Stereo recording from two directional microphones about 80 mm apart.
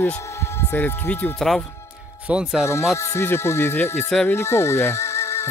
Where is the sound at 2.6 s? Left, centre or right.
Left.